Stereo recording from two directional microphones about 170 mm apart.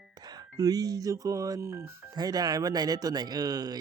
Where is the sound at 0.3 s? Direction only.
20° right (ahead or behind).